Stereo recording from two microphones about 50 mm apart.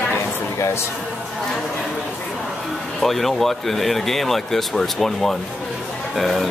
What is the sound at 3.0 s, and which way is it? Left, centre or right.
Speech, centre.